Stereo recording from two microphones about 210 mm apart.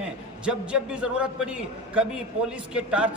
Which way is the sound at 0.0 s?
5° right (ahead or behind).